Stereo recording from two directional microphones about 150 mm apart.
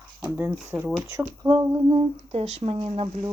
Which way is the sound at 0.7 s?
10° right (ahead or behind).